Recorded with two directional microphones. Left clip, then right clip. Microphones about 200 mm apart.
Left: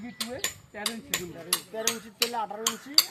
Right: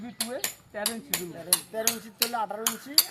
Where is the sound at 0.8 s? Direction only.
45° right (ahead or behind).